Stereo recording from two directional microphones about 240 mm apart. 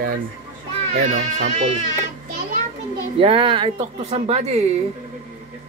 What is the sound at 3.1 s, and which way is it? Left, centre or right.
Speech, right.